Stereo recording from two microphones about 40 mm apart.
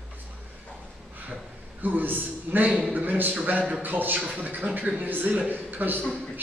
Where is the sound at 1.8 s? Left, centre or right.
Right.